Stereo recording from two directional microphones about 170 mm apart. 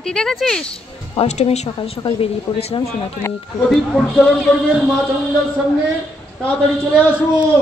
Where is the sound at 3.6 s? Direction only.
5° left (ahead or behind).